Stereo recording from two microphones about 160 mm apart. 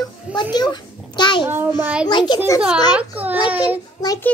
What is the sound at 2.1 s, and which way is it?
Speech, 25° left (ahead or behind).